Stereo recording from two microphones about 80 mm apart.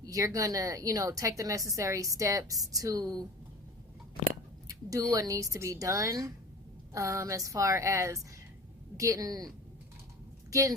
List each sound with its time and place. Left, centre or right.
0.0 s a woman's voice: right
4.7 s a sound: right
5.1 s a woman's voice: right
10.5 s a woman's voice: right